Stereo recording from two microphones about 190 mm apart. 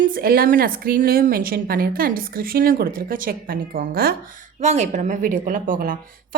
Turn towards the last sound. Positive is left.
turn(degrees=-45)  # may be behind; listen again after turning